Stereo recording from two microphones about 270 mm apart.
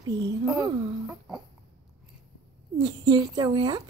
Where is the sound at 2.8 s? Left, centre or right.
Centre.